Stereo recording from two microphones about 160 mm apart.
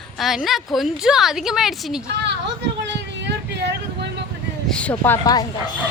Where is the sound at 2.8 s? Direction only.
90° right.